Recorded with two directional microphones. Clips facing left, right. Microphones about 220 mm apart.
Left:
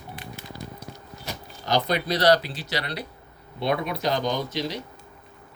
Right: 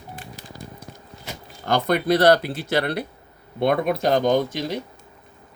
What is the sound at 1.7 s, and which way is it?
Speech, 55° right (ahead or behind).